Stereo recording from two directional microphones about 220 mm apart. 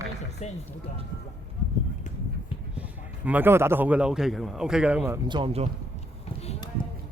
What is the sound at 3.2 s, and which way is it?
Speech, 10° right (ahead or behind).